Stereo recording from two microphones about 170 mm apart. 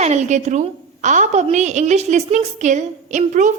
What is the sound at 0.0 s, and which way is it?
A woman's voice, 40° right (ahead or behind).